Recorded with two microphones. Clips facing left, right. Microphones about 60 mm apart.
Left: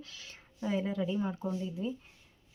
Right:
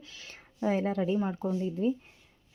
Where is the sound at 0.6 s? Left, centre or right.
Right.